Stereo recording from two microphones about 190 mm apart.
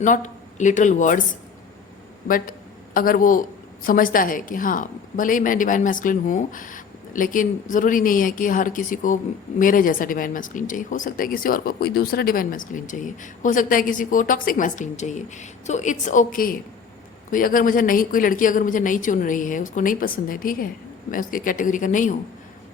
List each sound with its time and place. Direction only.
0.0 s speech: 40° left (ahead or behind)
2.2 s a man's voice: 45° left (ahead or behind)